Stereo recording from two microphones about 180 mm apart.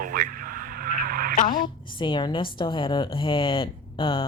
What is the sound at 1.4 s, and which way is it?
Speech, 50° left (ahead or behind).